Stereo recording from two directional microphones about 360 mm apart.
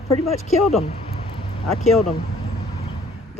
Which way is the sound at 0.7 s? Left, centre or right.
Centre.